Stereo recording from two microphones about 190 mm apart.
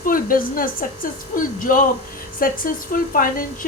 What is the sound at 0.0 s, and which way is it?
A woman's voice, 45° left (ahead or behind).